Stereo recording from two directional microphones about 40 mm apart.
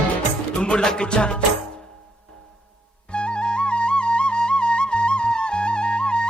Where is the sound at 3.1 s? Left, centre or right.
Left.